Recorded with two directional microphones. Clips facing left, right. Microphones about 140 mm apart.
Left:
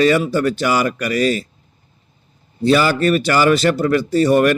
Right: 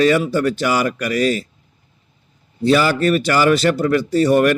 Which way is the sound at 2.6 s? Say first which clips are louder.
Even; 30° left (ahead or behind).